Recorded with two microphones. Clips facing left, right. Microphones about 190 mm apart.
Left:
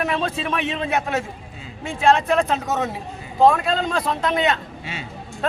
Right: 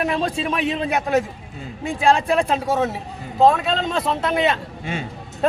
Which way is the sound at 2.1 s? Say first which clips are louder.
Even; 10° right (ahead or behind).